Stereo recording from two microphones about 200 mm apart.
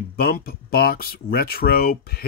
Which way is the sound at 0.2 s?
50° left (ahead or behind).